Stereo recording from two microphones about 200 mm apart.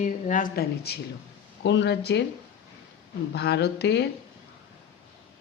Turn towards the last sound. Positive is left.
turn(degrees=55)  # may be behind; listen again after turning